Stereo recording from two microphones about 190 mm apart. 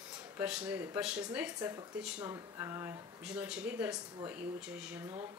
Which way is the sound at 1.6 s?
20° right (ahead or behind).